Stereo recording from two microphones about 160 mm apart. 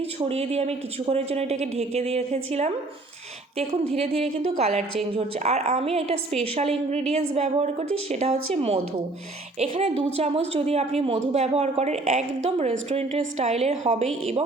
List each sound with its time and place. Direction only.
0.3 s a woman's voice: 40° right (ahead or behind)
3.9 s a woman's voice: 40° right (ahead or behind)